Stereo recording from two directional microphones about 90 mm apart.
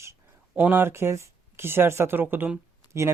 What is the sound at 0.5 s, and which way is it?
Speech, 20° right (ahead or behind).